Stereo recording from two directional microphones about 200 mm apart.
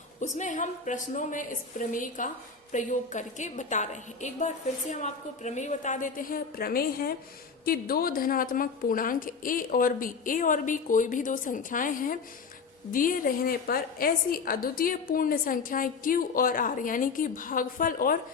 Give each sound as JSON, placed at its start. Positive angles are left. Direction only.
{"t": 0.2, "sound": "a woman's voice", "side_deg": 35}